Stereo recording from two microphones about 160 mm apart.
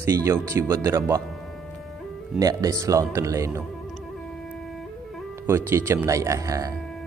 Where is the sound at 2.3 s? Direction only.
20° right (ahead or behind).